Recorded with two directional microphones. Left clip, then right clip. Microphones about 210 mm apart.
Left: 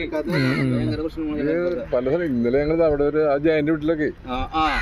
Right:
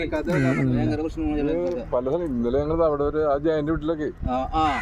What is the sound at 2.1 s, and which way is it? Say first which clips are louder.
Speech: left 3 dB; 35° left (ahead or behind).